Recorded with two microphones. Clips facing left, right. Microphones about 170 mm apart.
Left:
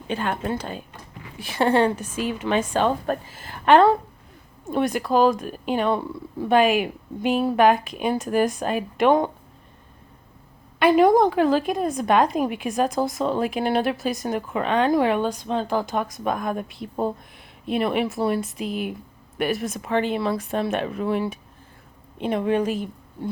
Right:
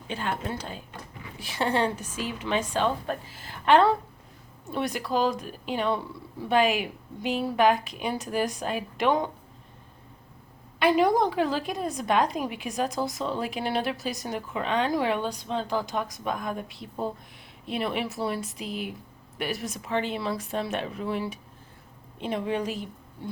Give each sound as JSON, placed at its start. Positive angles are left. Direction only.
{"t": 0.1, "sound": "a woman's voice", "side_deg": 60}
{"t": 10.8, "sound": "a woman's voice", "side_deg": 50}